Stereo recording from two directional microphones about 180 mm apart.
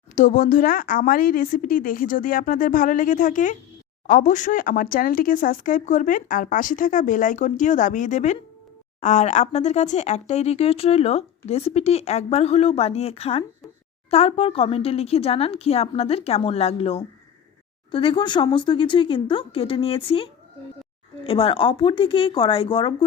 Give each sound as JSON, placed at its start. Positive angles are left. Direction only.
{"t": 0.2, "sound": "speech", "side_deg": 50}